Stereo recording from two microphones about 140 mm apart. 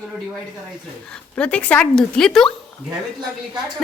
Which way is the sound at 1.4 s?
10° left (ahead or behind).